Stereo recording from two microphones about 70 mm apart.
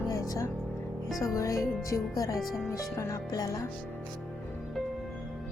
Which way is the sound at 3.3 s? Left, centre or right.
Left.